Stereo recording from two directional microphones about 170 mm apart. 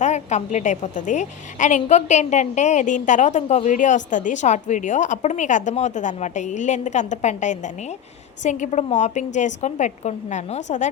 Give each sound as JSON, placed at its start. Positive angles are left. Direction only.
{"t": 0.0, "sound": "a woman's voice", "side_deg": 45}